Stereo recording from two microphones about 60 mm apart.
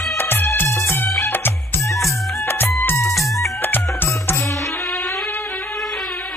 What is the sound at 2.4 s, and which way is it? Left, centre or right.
Music, left.